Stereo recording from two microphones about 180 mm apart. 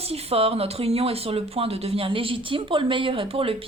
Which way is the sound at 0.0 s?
35° right (ahead or behind).